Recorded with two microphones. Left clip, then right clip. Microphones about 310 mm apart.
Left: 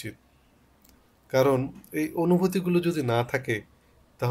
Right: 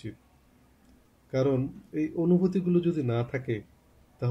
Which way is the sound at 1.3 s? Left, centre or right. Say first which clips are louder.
Left 5 dB; left.